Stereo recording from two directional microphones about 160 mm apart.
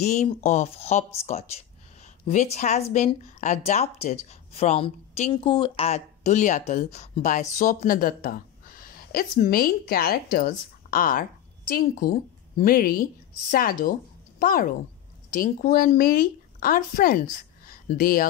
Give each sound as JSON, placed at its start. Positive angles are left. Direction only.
{"t": 0.0, "sound": "speech", "side_deg": 45}
{"t": 7.5, "sound": "speech", "side_deg": 60}
{"t": 17.6, "sound": "a sound", "side_deg": 65}